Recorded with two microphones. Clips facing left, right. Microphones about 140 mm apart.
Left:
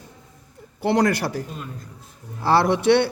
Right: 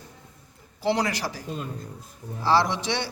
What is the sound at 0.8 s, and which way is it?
A man's voice, 50° left (ahead or behind).